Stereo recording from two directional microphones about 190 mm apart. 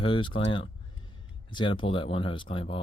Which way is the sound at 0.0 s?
25° left (ahead or behind).